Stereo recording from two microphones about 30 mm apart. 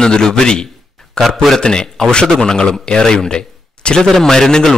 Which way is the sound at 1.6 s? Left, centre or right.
Left.